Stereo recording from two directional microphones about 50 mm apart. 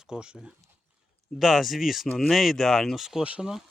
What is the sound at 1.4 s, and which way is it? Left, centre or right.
Speech, centre.